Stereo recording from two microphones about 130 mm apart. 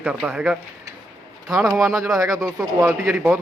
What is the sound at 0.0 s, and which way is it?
Speech, 10° right (ahead or behind).